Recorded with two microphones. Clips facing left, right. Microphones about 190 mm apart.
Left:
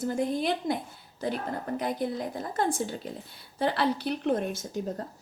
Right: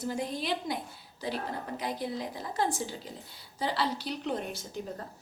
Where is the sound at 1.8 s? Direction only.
50° left (ahead or behind).